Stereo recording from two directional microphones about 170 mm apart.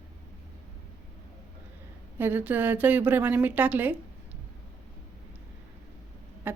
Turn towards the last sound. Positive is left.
turn(degrees=-10)  # may be behind; listen again after turning